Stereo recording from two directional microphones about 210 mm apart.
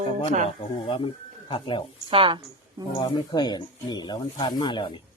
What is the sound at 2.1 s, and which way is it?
Speech, 25° right (ahead or behind).